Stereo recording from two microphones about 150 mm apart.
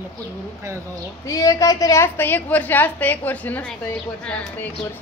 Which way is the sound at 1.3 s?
20° left (ahead or behind).